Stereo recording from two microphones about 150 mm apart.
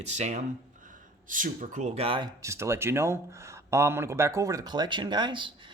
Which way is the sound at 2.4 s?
20° right (ahead or behind).